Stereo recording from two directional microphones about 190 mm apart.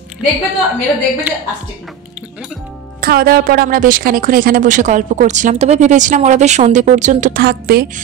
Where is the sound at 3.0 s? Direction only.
50° right (ahead or behind).